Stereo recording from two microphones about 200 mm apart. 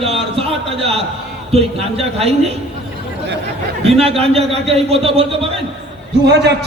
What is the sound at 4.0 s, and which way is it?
Speech, 30° right (ahead or behind).